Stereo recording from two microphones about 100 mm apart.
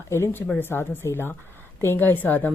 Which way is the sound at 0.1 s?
25° left (ahead or behind).